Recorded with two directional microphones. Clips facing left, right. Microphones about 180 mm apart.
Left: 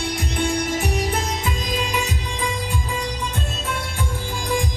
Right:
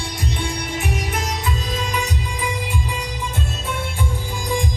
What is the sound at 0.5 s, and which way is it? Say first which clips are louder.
Music: left 3 dB; 40° left (ahead or behind).